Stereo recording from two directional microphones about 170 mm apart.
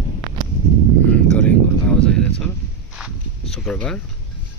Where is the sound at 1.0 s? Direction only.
5° left (ahead or behind).